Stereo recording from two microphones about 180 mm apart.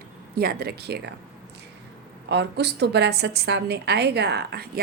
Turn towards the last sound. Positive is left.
turn(degrees=-65)  # may be behind; listen again after turning